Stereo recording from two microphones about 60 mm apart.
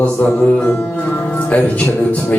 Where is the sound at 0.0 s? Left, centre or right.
Left.